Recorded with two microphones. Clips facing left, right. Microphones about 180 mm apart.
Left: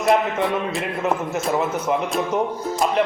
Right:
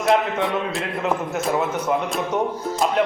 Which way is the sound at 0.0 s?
Centre (ahead or behind).